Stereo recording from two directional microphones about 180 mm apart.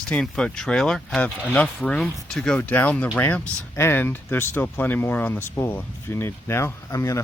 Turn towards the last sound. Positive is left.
turn(degrees=15)  # may be behind; listen again after turning